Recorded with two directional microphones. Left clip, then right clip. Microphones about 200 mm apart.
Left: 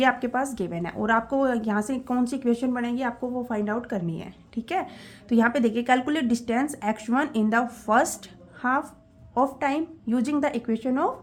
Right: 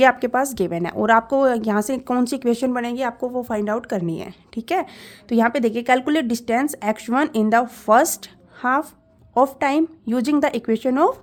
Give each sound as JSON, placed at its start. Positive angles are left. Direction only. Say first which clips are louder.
{"t": 0.0, "sound": "speech", "louder": "right 7 dB", "side_deg": -40}